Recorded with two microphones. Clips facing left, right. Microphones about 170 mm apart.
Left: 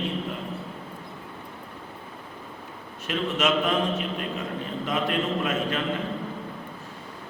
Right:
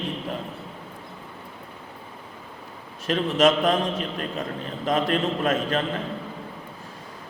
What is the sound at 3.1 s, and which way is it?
Speech, 40° right (ahead or behind).